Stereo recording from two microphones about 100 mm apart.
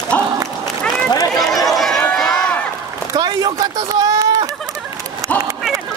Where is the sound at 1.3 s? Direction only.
Centre (ahead or behind).